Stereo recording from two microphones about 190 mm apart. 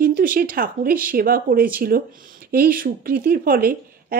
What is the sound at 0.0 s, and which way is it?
A woman's voice, 45° right (ahead or behind).